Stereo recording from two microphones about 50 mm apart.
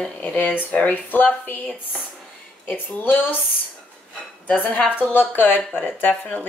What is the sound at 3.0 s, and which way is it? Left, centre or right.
Speech, left.